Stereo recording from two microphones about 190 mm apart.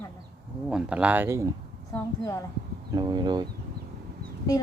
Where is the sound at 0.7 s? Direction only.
5° right (ahead or behind).